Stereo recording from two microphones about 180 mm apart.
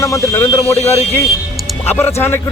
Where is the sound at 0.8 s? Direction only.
35° left (ahead or behind).